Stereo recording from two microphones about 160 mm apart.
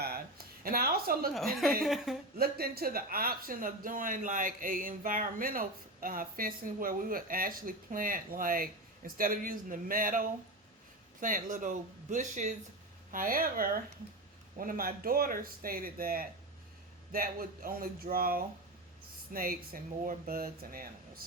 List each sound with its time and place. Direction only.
0.0 s a sound: 75° right (ahead or behind)
1.8 s a woman's voice: centre (ahead or behind)
2.4 s speech: 70° right (ahead or behind); by 12.5 s 50° right (ahead or behind)
13.1 s speech: 60° right (ahead or behind)